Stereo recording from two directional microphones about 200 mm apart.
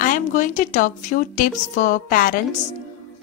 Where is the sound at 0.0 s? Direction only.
40° left (ahead or behind).